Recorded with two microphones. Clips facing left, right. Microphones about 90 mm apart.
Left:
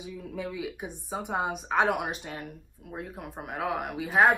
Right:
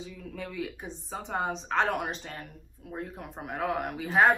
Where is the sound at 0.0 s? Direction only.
10° left (ahead or behind).